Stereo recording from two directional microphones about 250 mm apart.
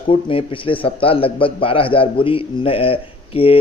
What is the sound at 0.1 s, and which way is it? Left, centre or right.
Speech, left.